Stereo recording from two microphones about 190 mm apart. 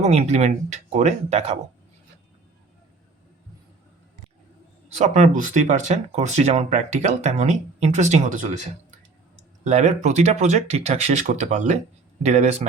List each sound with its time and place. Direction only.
0.0 s speech: 35° right (ahead or behind)
4.9 s speech: 35° right (ahead or behind)
9.6 s speech: 35° right (ahead or behind)